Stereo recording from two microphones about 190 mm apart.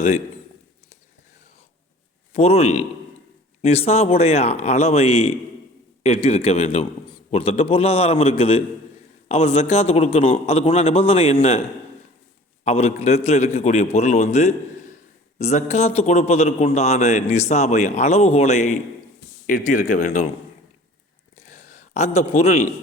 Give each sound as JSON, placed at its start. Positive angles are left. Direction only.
{"t": 2.3, "sound": "a man's voice", "side_deg": 35}
{"t": 12.6, "sound": "a man's voice", "side_deg": 35}
{"t": 21.3, "sound": "a sound", "side_deg": 40}